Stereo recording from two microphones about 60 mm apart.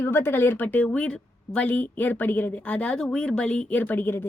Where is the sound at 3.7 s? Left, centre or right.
Left.